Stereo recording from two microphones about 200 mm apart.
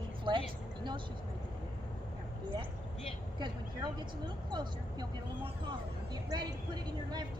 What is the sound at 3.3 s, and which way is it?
Speech, 20° right (ahead or behind).